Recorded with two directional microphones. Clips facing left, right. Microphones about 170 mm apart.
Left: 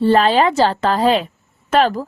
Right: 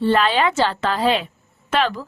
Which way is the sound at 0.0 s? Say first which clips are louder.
Left 4 dB; 35° left (ahead or behind).